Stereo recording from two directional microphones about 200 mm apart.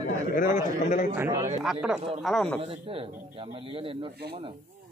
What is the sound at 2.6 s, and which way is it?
A man's voice, 30° right (ahead or behind).